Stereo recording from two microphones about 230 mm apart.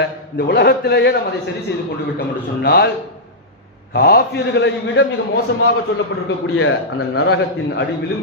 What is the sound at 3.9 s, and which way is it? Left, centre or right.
Speech, left.